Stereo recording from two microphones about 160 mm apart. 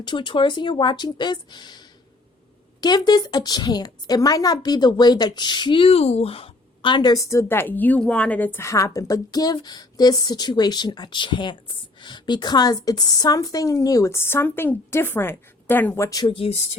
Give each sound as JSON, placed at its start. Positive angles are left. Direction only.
{"t": 0.0, "sound": "a woman's voice", "side_deg": 30}
{"t": 2.8, "sound": "a woman's voice", "side_deg": 25}
{"t": 16.3, "sound": "speech", "side_deg": 35}